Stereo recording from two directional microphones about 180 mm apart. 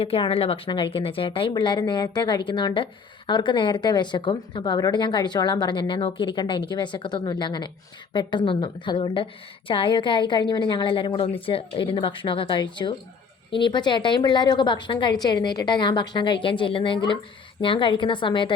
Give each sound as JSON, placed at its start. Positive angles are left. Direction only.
{"t": 0.0, "sound": "a woman's voice", "side_deg": 30}